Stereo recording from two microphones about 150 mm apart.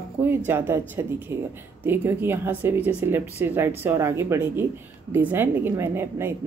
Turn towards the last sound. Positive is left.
turn(degrees=-15)  # may be behind; listen again after turning